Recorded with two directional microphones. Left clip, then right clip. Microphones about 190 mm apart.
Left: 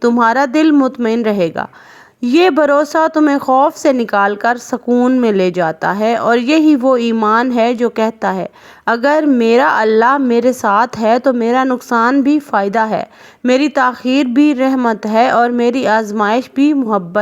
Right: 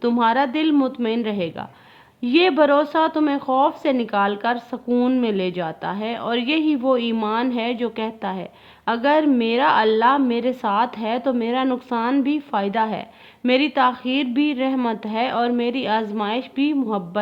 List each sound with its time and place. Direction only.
0.2 s a woman's voice: 35° left (ahead or behind)
4.9 s speech: 25° left (ahead or behind)
5.2 s a woman's voice: 40° left (ahead or behind)
11.9 s a woman's voice: 15° left (ahead or behind)
12.2 s a woman's voice: 35° left (ahead or behind)